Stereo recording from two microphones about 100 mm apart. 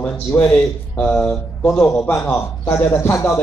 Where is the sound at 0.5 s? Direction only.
15° left (ahead or behind).